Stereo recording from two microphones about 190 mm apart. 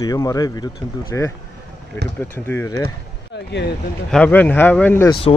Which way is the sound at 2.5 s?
15° left (ahead or behind).